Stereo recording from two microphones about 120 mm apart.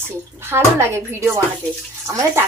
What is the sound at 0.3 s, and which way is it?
Speech, 20° right (ahead or behind).